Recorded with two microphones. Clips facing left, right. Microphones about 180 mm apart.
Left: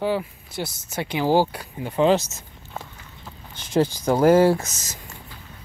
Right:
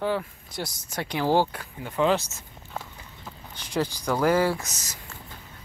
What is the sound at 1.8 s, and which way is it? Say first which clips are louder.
Speech: left 5 dB; 25° left (ahead or behind).